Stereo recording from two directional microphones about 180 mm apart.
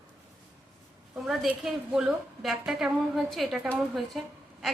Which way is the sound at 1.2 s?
Centre (ahead or behind).